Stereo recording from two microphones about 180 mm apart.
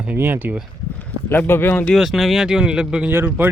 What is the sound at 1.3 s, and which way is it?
Speech, 10° left (ahead or behind).